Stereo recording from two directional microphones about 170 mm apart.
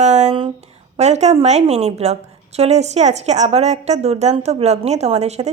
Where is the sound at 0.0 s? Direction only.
40° right (ahead or behind).